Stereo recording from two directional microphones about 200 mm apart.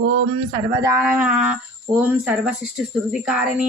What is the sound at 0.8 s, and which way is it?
Speech, 15° right (ahead or behind).